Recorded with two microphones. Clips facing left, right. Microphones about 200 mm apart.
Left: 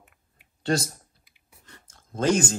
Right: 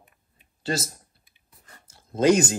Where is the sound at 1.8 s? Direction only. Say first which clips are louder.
Right 4 dB; 10° right (ahead or behind).